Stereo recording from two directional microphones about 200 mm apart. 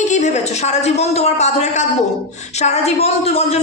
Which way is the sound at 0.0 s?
35° left (ahead or behind).